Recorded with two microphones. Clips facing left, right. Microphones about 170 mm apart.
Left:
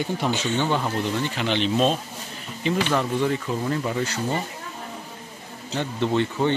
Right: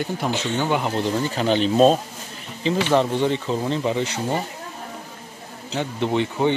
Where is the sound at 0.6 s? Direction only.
15° right (ahead or behind).